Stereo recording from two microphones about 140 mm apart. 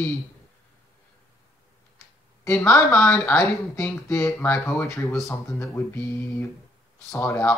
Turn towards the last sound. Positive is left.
turn(degrees=20)  # may be behind; listen again after turning